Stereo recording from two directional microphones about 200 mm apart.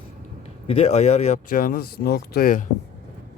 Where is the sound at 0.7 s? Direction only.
30° left (ahead or behind).